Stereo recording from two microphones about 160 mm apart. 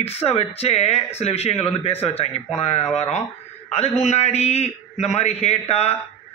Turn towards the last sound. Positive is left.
turn(degrees=40)  # may be behind; listen again after turning